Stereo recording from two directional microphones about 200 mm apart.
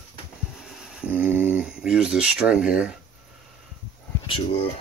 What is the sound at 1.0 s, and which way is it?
Speech, 5° right (ahead or behind).